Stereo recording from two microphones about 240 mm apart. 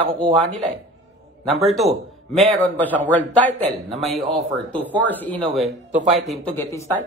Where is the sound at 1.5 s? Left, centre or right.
Centre.